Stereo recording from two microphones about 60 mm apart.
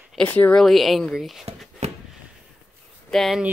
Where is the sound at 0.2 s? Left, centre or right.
Left.